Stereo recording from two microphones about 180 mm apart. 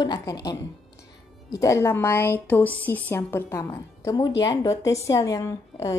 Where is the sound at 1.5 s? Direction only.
20° left (ahead or behind).